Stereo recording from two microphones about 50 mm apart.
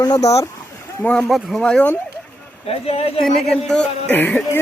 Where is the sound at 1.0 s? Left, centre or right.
Left.